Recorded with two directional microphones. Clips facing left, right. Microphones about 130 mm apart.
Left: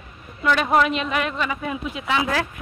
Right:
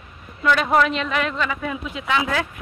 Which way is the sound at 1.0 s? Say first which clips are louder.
Right 1 dB; 15° left (ahead or behind).